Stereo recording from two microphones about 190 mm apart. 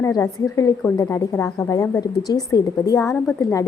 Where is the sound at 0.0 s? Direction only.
15° left (ahead or behind).